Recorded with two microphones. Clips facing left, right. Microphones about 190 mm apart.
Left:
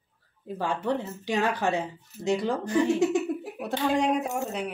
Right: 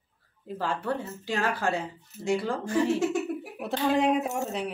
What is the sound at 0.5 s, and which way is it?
Speech, 15° left (ahead or behind).